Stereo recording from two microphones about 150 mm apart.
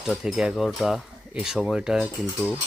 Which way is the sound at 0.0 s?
Centre (ahead or behind).